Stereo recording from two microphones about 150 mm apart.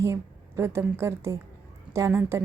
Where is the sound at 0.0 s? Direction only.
20° right (ahead or behind).